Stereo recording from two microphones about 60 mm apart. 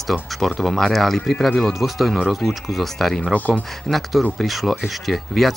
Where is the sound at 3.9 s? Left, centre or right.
Centre.